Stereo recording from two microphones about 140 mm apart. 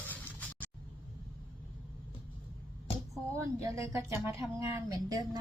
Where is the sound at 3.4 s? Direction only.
20° right (ahead or behind).